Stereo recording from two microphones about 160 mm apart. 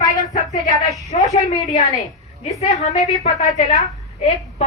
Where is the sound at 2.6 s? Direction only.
45° left (ahead or behind).